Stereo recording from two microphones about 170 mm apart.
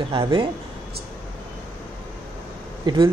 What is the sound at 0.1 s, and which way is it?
Speech, 30° right (ahead or behind).